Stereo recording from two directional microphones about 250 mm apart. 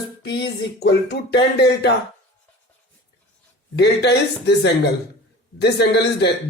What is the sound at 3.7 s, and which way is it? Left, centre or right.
Speech, left.